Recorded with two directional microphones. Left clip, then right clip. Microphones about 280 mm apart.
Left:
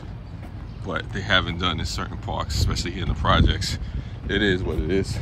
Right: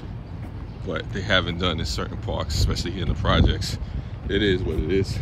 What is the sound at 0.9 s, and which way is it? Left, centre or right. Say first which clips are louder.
Speech: left 1 dB; centre.